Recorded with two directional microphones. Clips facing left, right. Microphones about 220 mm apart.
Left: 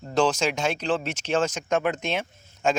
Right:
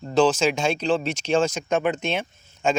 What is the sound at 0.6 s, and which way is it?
Speech, 10° right (ahead or behind).